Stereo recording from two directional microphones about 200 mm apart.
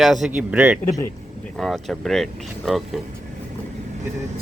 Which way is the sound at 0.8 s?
15° left (ahead or behind).